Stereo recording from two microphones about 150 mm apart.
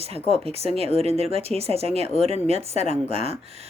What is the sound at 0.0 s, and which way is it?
Speech, 40° right (ahead or behind).